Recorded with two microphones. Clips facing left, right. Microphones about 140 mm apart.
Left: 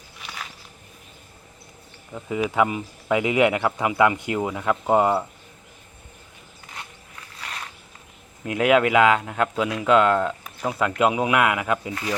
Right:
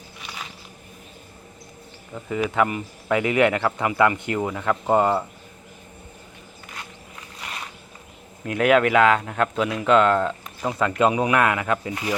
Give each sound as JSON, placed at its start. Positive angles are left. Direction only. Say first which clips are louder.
{"t": 2.1, "sound": "speech", "louder": "even", "side_deg": 10}
{"t": 7.3, "sound": "boat", "louder": "even", "side_deg": -10}
{"t": 8.4, "sound": "speech", "louder": "even", "side_deg": 15}